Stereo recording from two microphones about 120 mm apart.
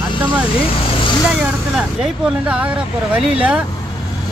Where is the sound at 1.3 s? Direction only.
5° right (ahead or behind).